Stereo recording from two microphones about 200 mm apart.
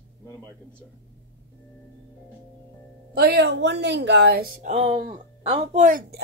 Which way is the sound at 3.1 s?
55° right (ahead or behind).